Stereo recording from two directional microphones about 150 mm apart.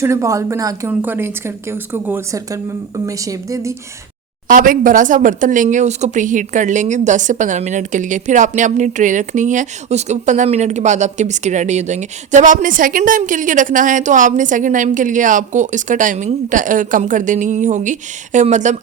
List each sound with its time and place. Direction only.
0.0 s a woman's voice: 20° right (ahead or behind)
4.4 s speech: 65° right (ahead or behind)